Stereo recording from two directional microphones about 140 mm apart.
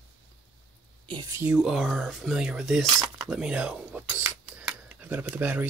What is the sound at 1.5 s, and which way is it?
Speech, 5° right (ahead or behind).